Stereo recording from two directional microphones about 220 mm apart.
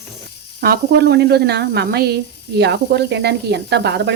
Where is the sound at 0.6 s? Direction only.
45° right (ahead or behind).